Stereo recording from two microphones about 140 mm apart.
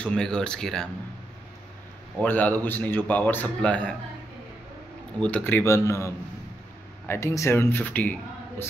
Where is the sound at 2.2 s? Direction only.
10° left (ahead or behind).